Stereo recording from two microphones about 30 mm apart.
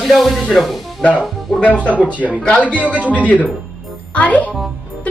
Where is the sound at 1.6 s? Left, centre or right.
Left.